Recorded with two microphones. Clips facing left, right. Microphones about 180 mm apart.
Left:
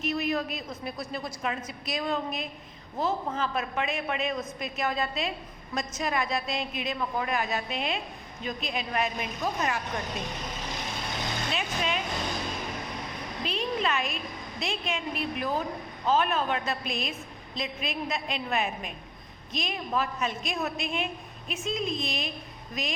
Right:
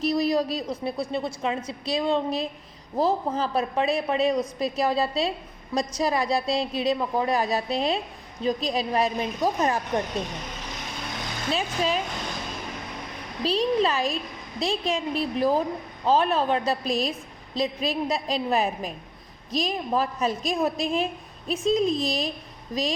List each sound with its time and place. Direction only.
0.0 s a woman's voice: 35° right (ahead or behind)
11.5 s a woman's voice: 35° right (ahead or behind)
13.4 s a woman's voice: 35° right (ahead or behind)